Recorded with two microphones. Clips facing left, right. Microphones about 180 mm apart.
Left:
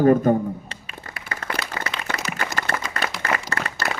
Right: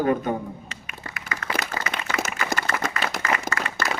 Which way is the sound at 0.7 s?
30° left (ahead or behind).